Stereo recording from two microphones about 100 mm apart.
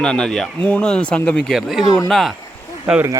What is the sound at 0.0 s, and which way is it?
Speech, 10° left (ahead or behind).